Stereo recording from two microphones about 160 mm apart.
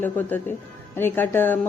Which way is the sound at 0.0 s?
10° left (ahead or behind).